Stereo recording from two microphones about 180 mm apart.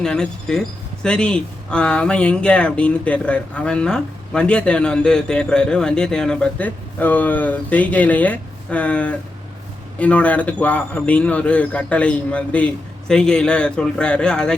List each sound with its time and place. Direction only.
0.0 s a man's voice: 5° left (ahead or behind)